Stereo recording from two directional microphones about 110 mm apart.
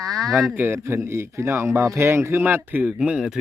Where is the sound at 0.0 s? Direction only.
30° right (ahead or behind).